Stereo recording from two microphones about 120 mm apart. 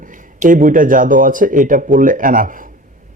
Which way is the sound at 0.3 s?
90° right.